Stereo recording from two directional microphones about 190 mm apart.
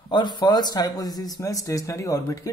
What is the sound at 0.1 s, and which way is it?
Speech, 25° left (ahead or behind).